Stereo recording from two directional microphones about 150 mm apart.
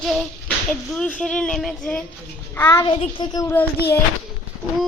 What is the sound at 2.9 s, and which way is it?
Speech, 35° left (ahead or behind).